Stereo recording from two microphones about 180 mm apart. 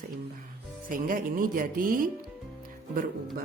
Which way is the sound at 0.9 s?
50° right (ahead or behind).